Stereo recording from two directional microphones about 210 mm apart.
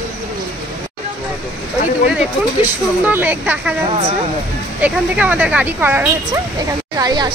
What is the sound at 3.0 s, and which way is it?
Speech, 10° right (ahead or behind).